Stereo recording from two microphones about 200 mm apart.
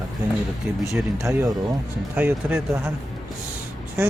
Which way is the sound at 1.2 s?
15° right (ahead or behind).